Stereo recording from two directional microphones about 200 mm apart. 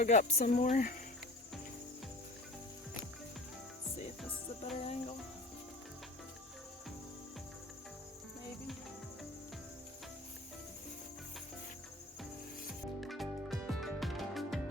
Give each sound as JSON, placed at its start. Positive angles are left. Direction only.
{"t": 0.0, "sound": "speech", "side_deg": 35}
{"t": 4.8, "sound": "speech", "side_deg": 30}
{"t": 13.0, "sound": "music", "side_deg": 0}